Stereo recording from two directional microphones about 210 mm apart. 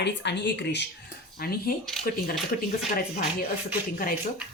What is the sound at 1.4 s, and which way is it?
Speech, 45° left (ahead or behind).